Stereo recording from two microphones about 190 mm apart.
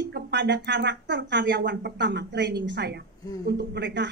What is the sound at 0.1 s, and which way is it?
Speech, 65° right (ahead or behind).